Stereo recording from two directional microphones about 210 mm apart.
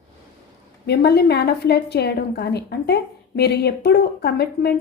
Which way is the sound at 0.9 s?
50° left (ahead or behind).